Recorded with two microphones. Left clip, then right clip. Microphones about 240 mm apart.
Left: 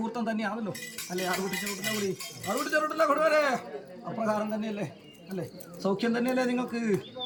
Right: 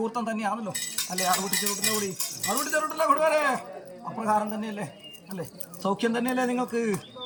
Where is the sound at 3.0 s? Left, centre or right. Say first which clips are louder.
Right 2 dB; left.